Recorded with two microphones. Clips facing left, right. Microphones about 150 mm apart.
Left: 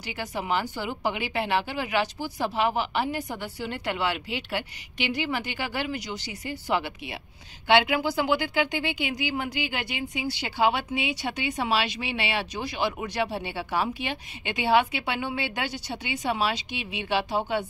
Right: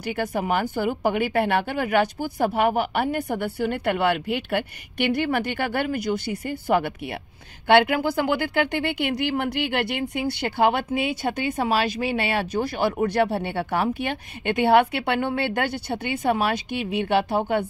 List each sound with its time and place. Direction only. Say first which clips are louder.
0.0 s speech: right 7 dB; 55° right (ahead or behind)